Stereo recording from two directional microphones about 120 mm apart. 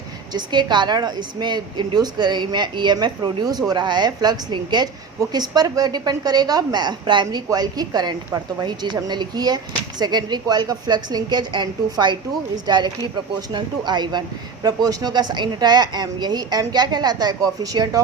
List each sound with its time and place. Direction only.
0.3 s a woman's voice: 40° right (ahead or behind)